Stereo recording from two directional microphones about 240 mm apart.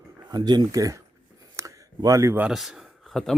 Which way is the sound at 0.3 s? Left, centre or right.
Centre.